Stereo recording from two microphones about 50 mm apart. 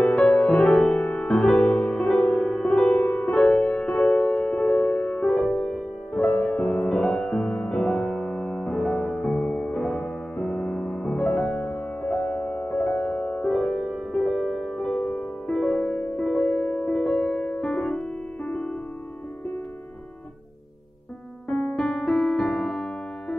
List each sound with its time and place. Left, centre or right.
0.0 s music: left
3.3 s music: centre
6.2 s music: left; by 15.0 s centre
15.0 s music: centre
18.4 s music: left
21.5 s music: centre